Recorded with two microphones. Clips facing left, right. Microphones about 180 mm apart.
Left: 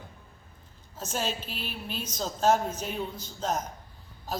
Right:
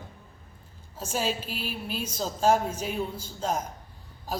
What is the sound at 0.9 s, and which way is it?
A woman's voice, 10° right (ahead or behind).